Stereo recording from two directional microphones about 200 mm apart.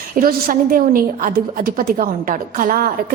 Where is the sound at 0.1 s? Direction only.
45° right (ahead or behind).